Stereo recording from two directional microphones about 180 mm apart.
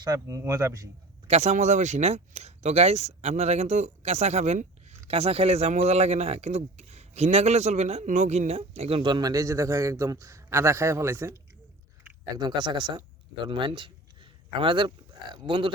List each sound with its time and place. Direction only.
0.0 s speech: 20° right (ahead or behind)
1.3 s speech: 40° right (ahead or behind); by 11.3 s 15° right (ahead or behind)
12.4 s speech: 25° right (ahead or behind)